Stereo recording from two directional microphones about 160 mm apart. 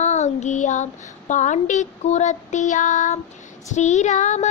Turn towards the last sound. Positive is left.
turn(degrees=50)  # may be behind; listen again after turning